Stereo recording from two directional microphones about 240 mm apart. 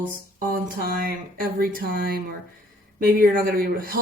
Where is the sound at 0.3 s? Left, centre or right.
Right.